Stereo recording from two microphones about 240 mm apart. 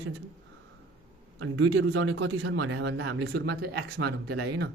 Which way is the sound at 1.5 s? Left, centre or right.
Right.